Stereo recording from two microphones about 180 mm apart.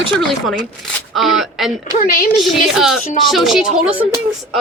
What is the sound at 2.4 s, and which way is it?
Speech, centre (ahead or behind).